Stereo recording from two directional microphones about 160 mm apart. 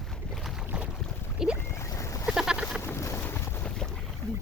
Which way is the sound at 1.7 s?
20° left (ahead or behind).